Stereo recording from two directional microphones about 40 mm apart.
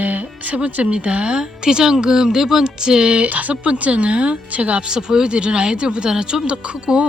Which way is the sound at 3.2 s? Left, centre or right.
Right.